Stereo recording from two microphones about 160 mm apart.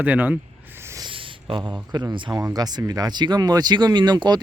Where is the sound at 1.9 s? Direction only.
30° right (ahead or behind).